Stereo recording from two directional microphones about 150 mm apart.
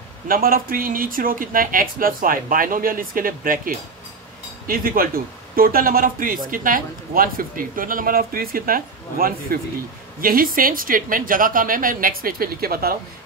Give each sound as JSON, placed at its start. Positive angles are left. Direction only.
{"t": 0.3, "sound": "speech", "side_deg": -75}